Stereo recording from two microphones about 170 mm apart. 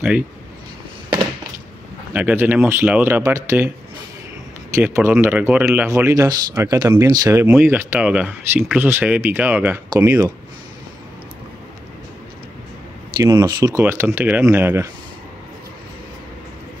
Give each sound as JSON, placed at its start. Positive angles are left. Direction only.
{"t": 2.1, "sound": "speech", "side_deg": -10}
{"t": 4.7, "sound": "speech", "side_deg": -15}
{"t": 13.2, "sound": "speech", "side_deg": -20}